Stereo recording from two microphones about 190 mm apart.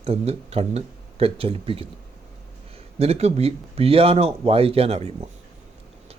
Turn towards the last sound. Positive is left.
turn(degrees=-30)  # may be behind; listen again after turning